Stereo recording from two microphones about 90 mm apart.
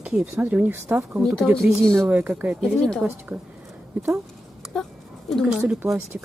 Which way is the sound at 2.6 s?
5° left (ahead or behind).